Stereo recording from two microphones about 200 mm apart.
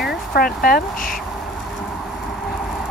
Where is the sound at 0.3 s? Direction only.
45° left (ahead or behind).